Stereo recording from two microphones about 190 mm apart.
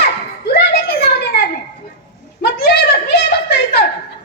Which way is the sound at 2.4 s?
60° left (ahead or behind).